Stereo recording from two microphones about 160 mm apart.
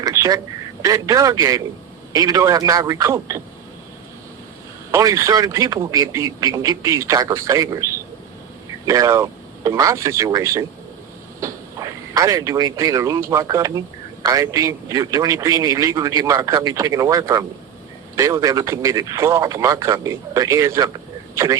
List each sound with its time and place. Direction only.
0.0 s quack: 20° right (ahead or behind)
0.8 s speech: 20° right (ahead or behind)
4.9 s speech: 20° right (ahead or behind)
8.9 s speech: 20° right (ahead or behind)
12.1 s speech: 20° right (ahead or behind)